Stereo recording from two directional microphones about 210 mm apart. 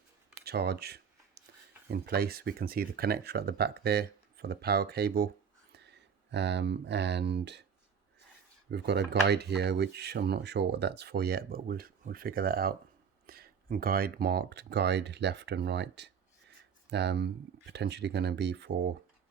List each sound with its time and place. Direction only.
0.4 s a sound: 50° right (ahead or behind)
1.9 s speech: 50° right (ahead or behind)
8.7 s speech: 55° right (ahead or behind)